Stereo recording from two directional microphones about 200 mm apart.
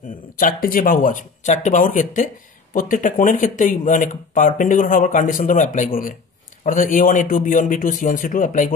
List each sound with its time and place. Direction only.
0.4 s speech: 45° left (ahead or behind)